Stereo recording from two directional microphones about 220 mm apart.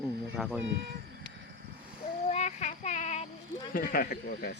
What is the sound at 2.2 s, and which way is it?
Child singing, 30° left (ahead or behind).